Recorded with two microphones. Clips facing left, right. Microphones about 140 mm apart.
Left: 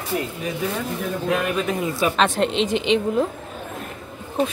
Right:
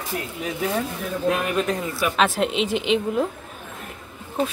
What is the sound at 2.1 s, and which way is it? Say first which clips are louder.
A woman's voice: left 1 dB; 5° right (ahead or behind).